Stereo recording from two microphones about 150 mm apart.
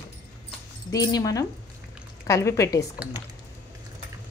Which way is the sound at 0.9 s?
25° left (ahead or behind).